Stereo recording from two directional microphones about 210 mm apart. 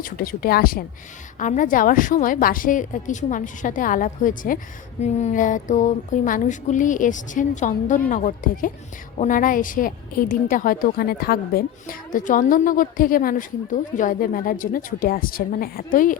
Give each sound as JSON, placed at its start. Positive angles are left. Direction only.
{"t": 0.0, "sound": "a woman's voice", "side_deg": 45}